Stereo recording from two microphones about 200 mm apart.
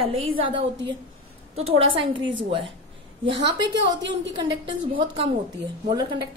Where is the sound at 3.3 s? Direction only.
60° right (ahead or behind).